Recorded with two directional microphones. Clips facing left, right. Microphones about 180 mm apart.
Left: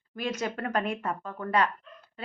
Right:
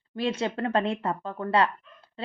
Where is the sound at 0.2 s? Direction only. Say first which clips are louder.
Right 4 dB; 30° right (ahead or behind).